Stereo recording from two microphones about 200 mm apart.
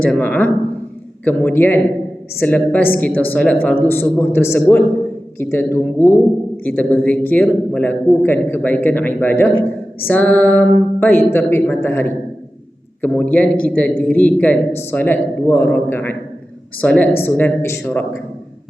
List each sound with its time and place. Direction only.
0.0 s a man's voice: 5° left (ahead or behind)